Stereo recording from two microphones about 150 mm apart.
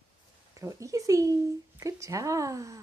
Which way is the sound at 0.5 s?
20° right (ahead or behind).